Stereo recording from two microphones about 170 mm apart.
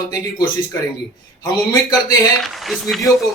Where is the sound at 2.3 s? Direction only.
Centre (ahead or behind).